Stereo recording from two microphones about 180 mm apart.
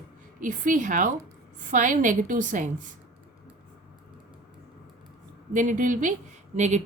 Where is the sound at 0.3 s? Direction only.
45° right (ahead or behind).